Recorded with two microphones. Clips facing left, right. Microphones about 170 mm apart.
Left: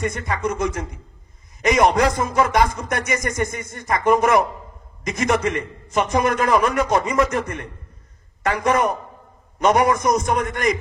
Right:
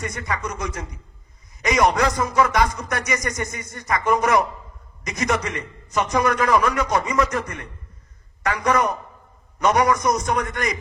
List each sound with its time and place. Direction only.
0.0 s speech: 25° left (ahead or behind)